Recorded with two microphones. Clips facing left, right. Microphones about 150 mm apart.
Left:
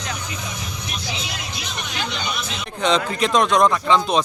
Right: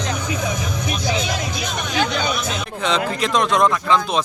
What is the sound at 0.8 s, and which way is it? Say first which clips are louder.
Speech: right 8 dB; 50° right (ahead or behind).